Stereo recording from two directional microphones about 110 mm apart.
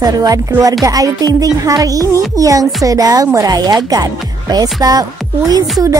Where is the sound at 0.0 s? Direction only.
35° right (ahead or behind).